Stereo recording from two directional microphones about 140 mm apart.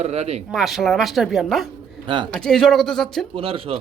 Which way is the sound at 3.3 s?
40° right (ahead or behind).